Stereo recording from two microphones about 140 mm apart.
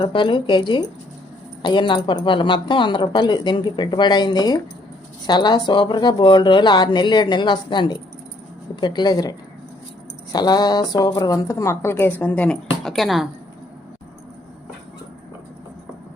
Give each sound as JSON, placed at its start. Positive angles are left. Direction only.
{"t": 0.0, "sound": "speech", "side_deg": 35}
{"t": 10.3, "sound": "speech", "side_deg": 30}